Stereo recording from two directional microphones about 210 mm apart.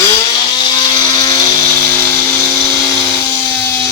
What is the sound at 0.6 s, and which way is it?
Vehicle, 20° left (ahead or behind).